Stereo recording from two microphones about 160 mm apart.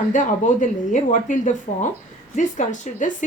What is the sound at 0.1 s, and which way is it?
A woman's voice, 55° left (ahead or behind).